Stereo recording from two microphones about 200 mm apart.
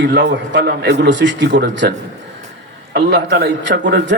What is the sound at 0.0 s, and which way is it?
A man's voice, 60° right (ahead or behind).